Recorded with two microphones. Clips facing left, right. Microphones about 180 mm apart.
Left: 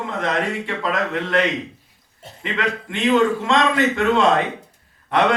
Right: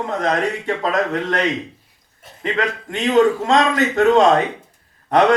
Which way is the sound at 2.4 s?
40° right (ahead or behind).